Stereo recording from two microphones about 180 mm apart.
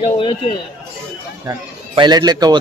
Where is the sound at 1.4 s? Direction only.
25° right (ahead or behind).